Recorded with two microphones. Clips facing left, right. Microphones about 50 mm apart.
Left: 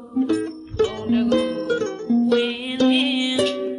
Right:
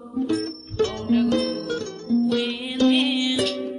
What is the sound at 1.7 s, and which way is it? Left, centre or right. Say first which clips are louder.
Music: left 5 dB; left.